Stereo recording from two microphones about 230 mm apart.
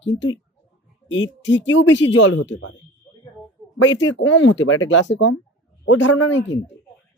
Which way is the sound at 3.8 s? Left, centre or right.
Left.